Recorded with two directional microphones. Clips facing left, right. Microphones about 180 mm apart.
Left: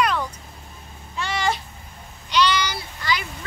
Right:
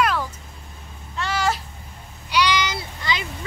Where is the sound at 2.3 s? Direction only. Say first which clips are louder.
Even; 15° right (ahead or behind).